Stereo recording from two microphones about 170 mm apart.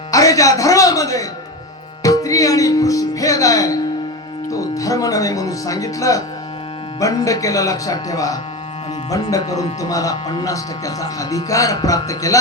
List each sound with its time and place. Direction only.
0.1 s music: 20° left (ahead or behind)
4.4 s speech: 20° left (ahead or behind)
9.4 s speech: 20° left (ahead or behind)